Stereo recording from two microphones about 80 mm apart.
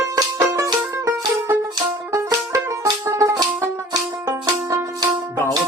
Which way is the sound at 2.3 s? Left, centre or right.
Right.